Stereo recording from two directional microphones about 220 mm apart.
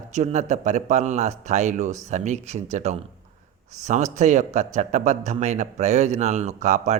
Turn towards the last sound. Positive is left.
turn(degrees=-30)  # may be behind; listen again after turning